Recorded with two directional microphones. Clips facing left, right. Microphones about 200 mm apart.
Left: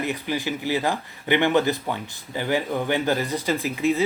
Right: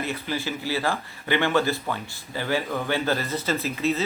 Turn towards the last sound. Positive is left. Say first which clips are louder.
# left 3 dB
turn(degrees=15)  # may be behind; listen again after turning